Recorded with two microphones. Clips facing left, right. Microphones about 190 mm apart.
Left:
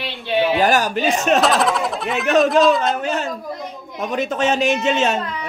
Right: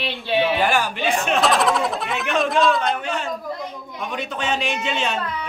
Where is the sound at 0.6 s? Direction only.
40° left (ahead or behind).